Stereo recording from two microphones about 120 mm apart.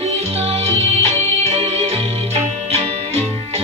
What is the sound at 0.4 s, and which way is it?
Music, 55° right (ahead or behind).